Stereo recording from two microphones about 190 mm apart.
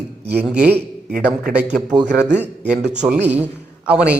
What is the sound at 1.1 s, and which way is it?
Speech, 50° right (ahead or behind).